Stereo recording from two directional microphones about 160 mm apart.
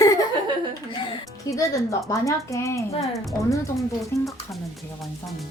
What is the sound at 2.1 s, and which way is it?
Speech, 20° left (ahead or behind).